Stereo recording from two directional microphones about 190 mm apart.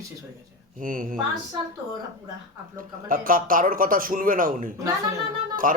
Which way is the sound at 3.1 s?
45° right (ahead or behind).